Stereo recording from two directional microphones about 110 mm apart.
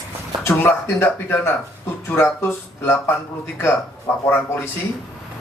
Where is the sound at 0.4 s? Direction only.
20° left (ahead or behind).